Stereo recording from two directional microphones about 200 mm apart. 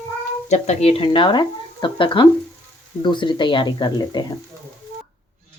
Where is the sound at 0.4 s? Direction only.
35° left (ahead or behind); by 4.4 s 20° left (ahead or behind).